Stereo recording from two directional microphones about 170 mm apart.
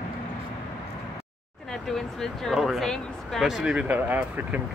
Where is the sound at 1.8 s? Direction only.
5° left (ahead or behind).